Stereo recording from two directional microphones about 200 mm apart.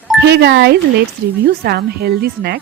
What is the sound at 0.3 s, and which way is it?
Speech, 55° right (ahead or behind).